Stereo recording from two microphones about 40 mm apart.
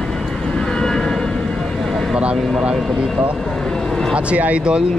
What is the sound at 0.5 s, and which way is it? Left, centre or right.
Vehicle, centre.